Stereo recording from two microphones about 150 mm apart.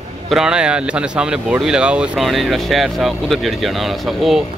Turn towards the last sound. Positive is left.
turn(degrees=0)  # may be behind; listen again after turning